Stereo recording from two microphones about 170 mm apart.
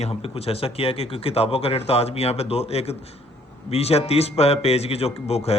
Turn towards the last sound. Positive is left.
turn(degrees=35)  # may be behind; listen again after turning